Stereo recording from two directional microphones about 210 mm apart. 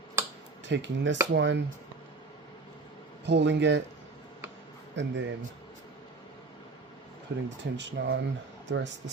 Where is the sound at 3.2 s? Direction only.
55° right (ahead or behind).